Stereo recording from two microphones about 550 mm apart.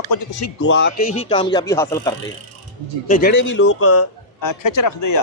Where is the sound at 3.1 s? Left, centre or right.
Centre; by 5.1 s left.